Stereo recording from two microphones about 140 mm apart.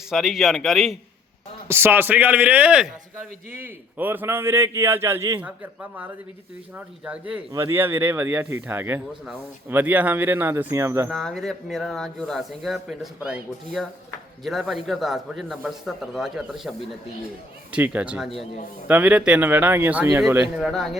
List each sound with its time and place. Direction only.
0.1 s speech: 5° right (ahead or behind)
1.6 s a man's voice: 15° right (ahead or behind)
6.7 s a man's voice: 10° right (ahead or behind)
11.1 s a man's voice: centre (ahead or behind); by 20.2 s 15° right (ahead or behind)
20.6 s speech: 5° right (ahead or behind)